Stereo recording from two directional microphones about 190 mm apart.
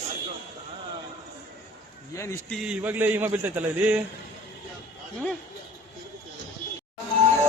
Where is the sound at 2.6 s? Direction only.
5° right (ahead or behind).